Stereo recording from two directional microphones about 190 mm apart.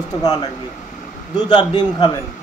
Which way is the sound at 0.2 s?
20° left (ahead or behind).